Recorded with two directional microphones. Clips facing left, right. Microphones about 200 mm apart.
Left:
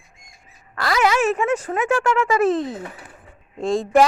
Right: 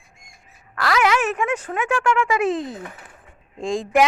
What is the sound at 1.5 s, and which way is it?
A woman's voice, 10° left (ahead or behind).